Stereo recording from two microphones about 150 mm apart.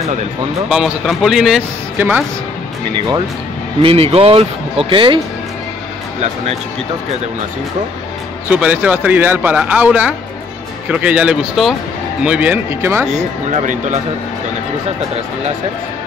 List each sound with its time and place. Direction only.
0.7 s speech: 5° right (ahead or behind)
3.8 s speech: 40° right (ahead or behind)
8.5 s speech: 10° right (ahead or behind)
13.6 s speech: 55° right (ahead or behind)